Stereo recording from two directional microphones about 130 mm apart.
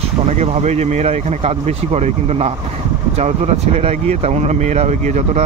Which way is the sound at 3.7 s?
55° right (ahead or behind).